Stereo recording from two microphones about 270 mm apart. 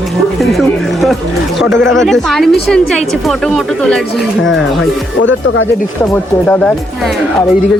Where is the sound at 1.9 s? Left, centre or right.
Centre.